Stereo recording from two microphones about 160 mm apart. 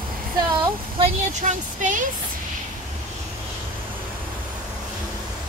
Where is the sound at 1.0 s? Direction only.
50° right (ahead or behind).